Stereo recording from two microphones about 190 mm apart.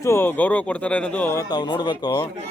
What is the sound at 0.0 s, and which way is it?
A man's voice, 15° left (ahead or behind).